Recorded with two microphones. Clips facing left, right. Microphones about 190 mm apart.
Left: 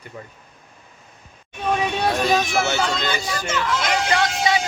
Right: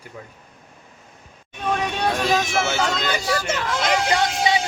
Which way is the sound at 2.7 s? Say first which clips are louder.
Even; 5° right (ahead or behind).